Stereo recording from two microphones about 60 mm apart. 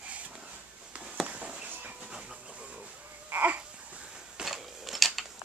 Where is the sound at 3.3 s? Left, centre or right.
Right.